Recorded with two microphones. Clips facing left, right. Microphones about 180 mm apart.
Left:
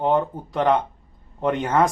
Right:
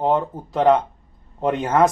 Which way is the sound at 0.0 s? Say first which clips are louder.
Even; 20° right (ahead or behind).